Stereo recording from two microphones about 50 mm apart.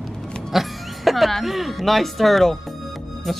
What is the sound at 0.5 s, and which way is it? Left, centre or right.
Speech, centre.